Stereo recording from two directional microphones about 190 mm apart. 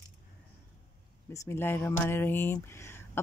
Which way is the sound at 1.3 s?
15° left (ahead or behind).